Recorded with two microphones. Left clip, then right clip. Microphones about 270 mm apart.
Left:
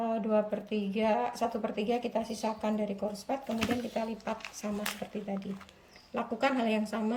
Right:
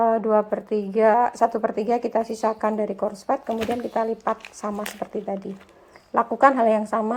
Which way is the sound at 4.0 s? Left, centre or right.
Right.